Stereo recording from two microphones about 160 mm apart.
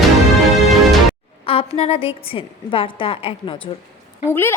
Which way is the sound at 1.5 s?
35° left (ahead or behind).